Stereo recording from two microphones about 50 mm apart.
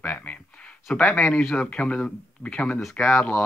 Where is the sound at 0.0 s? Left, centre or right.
Left.